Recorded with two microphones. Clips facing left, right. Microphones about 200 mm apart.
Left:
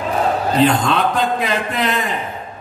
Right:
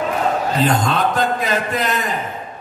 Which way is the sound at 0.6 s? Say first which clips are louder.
Left 4 dB; 45° right (ahead or behind).